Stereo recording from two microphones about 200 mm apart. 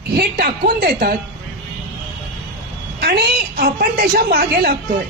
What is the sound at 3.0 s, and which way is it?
A woman's voice, 50° right (ahead or behind).